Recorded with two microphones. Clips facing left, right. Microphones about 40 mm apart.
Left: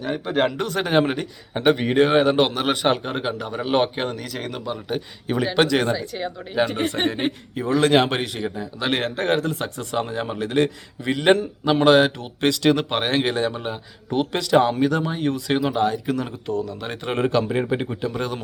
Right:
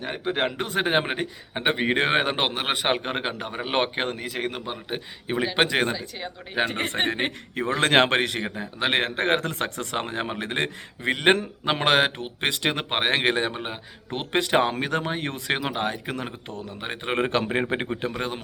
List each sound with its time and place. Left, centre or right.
0.3 s a man's voice: centre
3.0 s speech: right
4.2 s a man's voice: right
5.9 s speech: centre
6.5 s a man's voice: right
8.8 s speech: right
16.5 s speech: left
16.8 s a man's voice: right
17.2 s speech: right